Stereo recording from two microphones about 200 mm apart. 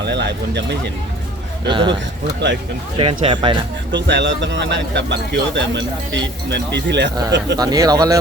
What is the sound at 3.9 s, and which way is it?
Speech, 65° right (ahead or behind).